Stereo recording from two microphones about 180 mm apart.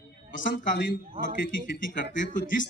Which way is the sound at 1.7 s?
80° left.